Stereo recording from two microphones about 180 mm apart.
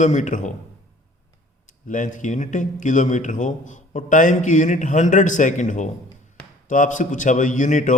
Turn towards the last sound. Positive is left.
turn(degrees=45)  # may be behind; listen again after turning